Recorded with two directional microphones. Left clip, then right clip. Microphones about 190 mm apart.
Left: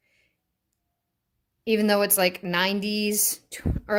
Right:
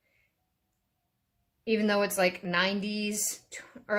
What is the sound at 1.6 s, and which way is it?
Speech, 50° left (ahead or behind).